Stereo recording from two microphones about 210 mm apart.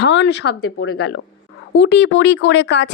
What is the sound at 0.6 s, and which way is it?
Speech, 90° left.